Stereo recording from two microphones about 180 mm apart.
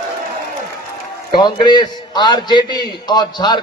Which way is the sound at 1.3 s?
25° left (ahead or behind).